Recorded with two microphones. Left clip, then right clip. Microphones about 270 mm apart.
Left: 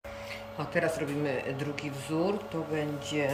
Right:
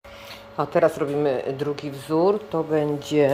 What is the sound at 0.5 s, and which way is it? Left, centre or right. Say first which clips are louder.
Speech: right 11 dB; right.